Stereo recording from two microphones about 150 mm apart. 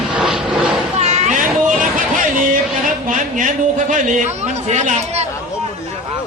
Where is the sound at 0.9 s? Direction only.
50° right (ahead or behind).